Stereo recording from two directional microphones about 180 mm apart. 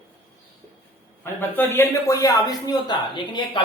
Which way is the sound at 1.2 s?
10° left (ahead or behind).